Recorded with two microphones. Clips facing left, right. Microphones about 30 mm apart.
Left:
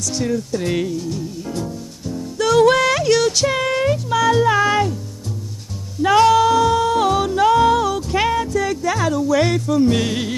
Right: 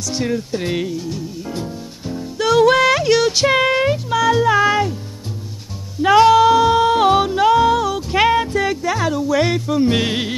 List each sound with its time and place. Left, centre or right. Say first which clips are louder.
0.0 s speech: even; right
0.7 s music: left 1 dB; centre
4.1 s music: even; centre
4.6 s speech: right 1 dB; centre
6.0 s music: right 2 dB; centre
8.1 s music: right 7 dB; right
8.8 s music: even; centre